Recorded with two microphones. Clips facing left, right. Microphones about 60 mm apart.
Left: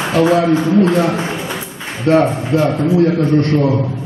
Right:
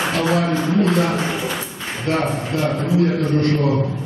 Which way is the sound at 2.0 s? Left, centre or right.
Left.